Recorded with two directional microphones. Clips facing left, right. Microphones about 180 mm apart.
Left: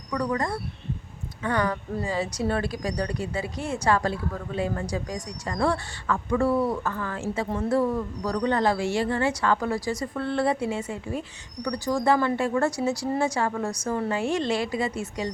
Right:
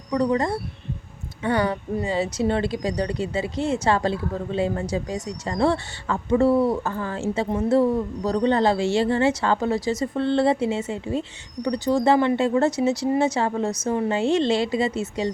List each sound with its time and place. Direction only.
0.1 s speech: 25° right (ahead or behind)